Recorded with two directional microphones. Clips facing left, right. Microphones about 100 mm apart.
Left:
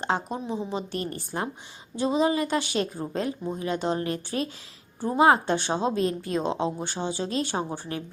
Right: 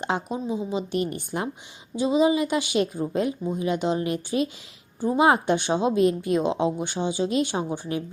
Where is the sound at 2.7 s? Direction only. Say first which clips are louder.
Right 4 dB; 15° right (ahead or behind).